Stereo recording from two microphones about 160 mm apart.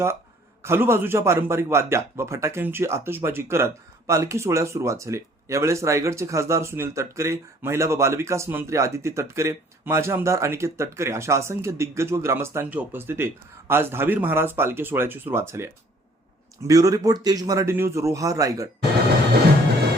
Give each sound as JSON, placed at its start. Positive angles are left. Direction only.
{"t": 0.6, "sound": "a man's voice", "side_deg": -15}